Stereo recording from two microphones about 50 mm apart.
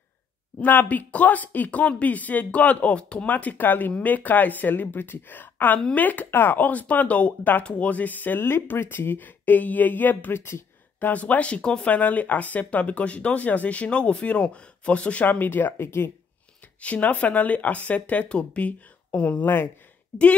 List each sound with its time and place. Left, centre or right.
0.6 s speech: left
8.4 s speech: left
10.3 s speech: left
11.0 s speech: left
11.9 s speech: left
15.2 s speech: left
16.8 s speech: left
19.4 s speech: left